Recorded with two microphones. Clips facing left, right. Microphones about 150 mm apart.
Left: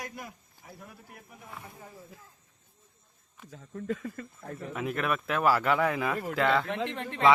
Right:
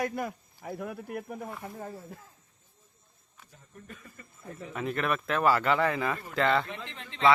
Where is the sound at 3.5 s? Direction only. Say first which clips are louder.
Left 14 dB; 90° left.